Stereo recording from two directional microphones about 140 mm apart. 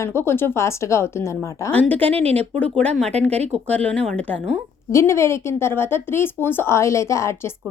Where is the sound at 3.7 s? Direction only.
5° left (ahead or behind).